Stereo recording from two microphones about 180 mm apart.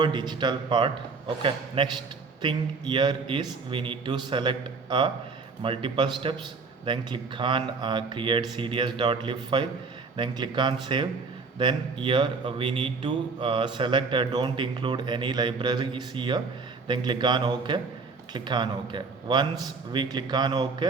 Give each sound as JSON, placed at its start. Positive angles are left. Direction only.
{"t": 0.0, "sound": "a man's voice", "side_deg": -25}